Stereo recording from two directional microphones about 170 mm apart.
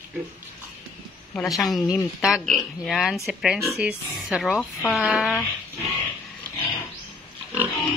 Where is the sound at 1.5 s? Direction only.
Centre (ahead or behind).